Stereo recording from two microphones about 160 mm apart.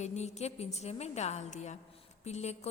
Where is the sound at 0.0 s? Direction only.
45° left (ahead or behind).